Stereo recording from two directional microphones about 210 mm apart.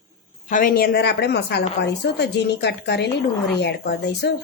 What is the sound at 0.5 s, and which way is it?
A woman's voice, 45° left (ahead or behind).